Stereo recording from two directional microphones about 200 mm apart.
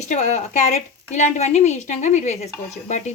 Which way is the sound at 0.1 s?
35° left (ahead or behind).